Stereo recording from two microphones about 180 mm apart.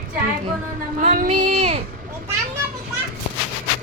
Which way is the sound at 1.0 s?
45° right (ahead or behind).